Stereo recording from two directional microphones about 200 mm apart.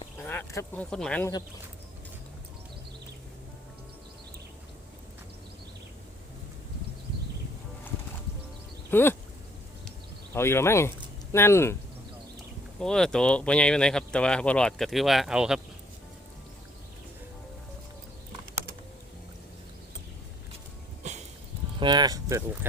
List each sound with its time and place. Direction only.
0.2 s speech: 10° left (ahead or behind)
8.9 s a sound: 10° left (ahead or behind)
10.3 s speech: 10° left (ahead or behind)
12.8 s speech: 5° left (ahead or behind)
21.0 s a sound: 35° right (ahead or behind)
21.8 s speech: 20° right (ahead or behind)